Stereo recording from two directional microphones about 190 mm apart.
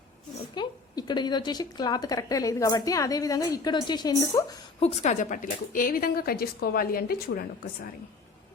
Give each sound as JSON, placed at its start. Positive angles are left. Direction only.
{"t": 0.5, "sound": "speech", "side_deg": 20}
{"t": 4.8, "sound": "speech", "side_deg": 35}